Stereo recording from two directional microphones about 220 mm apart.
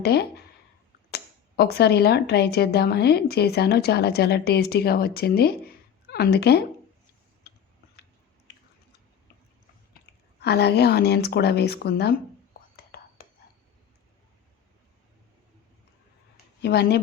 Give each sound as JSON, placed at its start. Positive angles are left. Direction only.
{"t": 0.0, "sound": "speech", "side_deg": 45}
{"t": 10.4, "sound": "speech", "side_deg": 50}
{"t": 12.7, "sound": "whispering", "side_deg": 45}
{"t": 16.6, "sound": "speech", "side_deg": 50}